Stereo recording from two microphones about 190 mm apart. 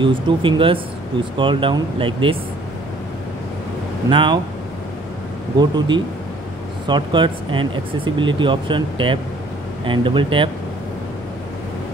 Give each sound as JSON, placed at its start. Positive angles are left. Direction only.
{"t": 0.0, "sound": "speech", "side_deg": -25}
{"t": 4.1, "sound": "speech", "side_deg": -25}
{"t": 5.6, "sound": "speech", "side_deg": -25}